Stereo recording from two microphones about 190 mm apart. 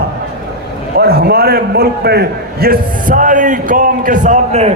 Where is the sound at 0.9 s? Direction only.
55° right (ahead or behind); by 4.7 s 40° right (ahead or behind).